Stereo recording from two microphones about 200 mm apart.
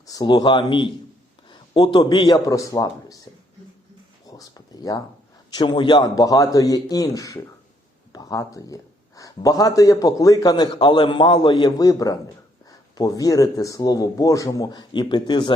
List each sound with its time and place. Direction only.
0.0 s a man's voice: 20° left (ahead or behind)
4.3 s a sound: 20° left (ahead or behind)
5.5 s a man's voice: 25° left (ahead or behind)